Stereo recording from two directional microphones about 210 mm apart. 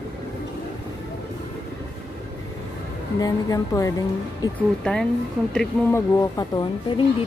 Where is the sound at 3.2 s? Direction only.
15° left (ahead or behind).